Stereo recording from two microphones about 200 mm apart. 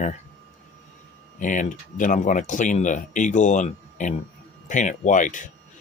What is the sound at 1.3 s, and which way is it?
Speech, 40° left (ahead or behind).